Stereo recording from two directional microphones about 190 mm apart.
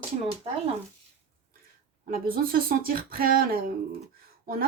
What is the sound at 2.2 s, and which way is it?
A woman's voice, 50° right (ahead or behind).